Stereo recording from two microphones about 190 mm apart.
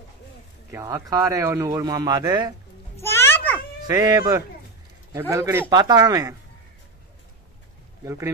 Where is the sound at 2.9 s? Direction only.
15° left (ahead or behind).